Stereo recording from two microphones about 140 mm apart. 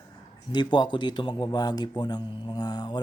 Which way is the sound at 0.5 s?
30° left (ahead or behind).